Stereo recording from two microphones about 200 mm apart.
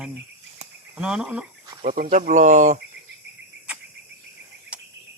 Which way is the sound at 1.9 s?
45° right (ahead or behind).